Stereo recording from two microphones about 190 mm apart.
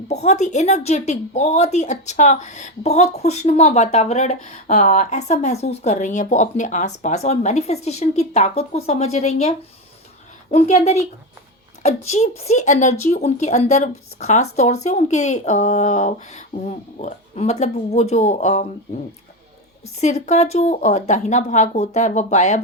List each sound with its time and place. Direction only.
0.1 s a woman's voice: 35° left (ahead or behind)
20.0 s a woman's voice: 35° left (ahead or behind)